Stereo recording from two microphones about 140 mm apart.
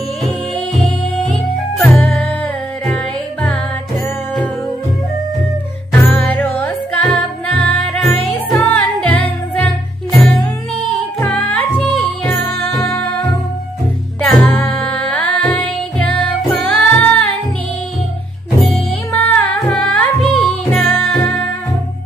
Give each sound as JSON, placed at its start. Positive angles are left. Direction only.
{"t": 0.7, "sound": "music", "side_deg": 5}
{"t": 5.9, "sound": "music", "side_deg": 10}
{"t": 12.7, "sound": "music", "side_deg": 25}
{"t": 14.2, "sound": "music", "side_deg": 5}
{"t": 18.6, "sound": "music", "side_deg": 10}